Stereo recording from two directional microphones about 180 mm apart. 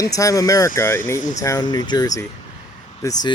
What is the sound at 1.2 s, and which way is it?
Speech, 45° left (ahead or behind).